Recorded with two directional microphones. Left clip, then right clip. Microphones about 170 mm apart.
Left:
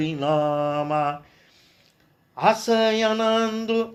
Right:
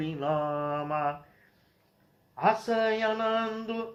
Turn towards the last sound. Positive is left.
turn(degrees=35)  # may be behind; listen again after turning